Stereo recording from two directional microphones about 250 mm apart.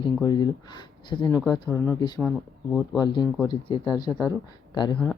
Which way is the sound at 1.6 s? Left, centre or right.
Centre.